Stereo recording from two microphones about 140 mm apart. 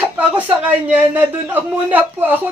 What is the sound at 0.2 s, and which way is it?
A man's voice, 10° right (ahead or behind).